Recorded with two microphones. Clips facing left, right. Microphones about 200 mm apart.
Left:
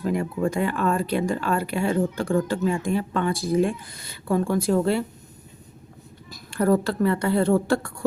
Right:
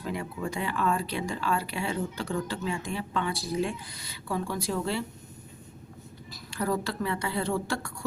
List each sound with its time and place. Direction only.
0.0 s speech: 45° left (ahead or behind)
6.3 s speech: 55° left (ahead or behind)